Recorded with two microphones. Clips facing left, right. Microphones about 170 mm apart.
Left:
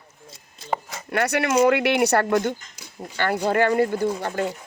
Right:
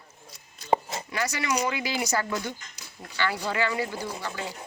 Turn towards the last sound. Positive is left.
turn(degrees=55)  # may be behind; listen again after turning